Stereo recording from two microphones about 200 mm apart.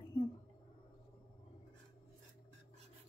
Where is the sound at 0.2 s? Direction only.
25° left (ahead or behind).